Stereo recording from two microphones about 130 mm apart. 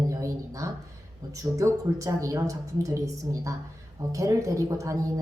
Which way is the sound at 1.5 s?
25° right (ahead or behind).